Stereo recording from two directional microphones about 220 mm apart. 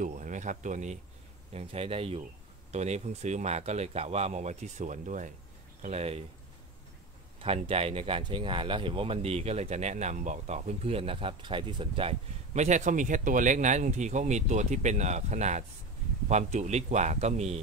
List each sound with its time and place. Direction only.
0.0 s speech: 35° right (ahead or behind)
7.3 s speech: 25° right (ahead or behind)